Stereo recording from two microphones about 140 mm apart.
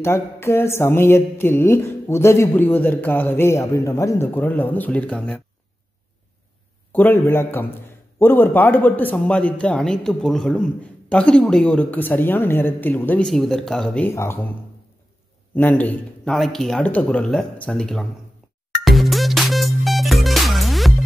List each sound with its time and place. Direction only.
0.0 s speech: 20° left (ahead or behind)
6.9 s speech: 15° left (ahead or behind)
13.3 s speech: centre (ahead or behind)
18.9 s music: centre (ahead or behind)